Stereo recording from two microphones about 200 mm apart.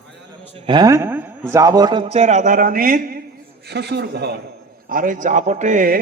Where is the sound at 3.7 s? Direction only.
55° right (ahead or behind).